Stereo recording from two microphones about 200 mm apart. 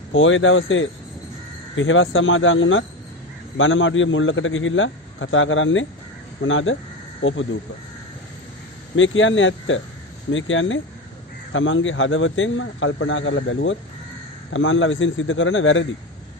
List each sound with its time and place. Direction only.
0.1 s a man's voice: 75° left (ahead or behind)
8.9 s a man's voice: 75° left (ahead or behind)